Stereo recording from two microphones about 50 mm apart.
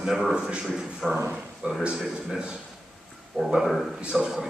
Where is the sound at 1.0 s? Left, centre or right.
Centre.